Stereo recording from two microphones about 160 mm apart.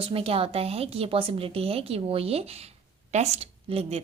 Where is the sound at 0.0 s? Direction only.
35° right (ahead or behind).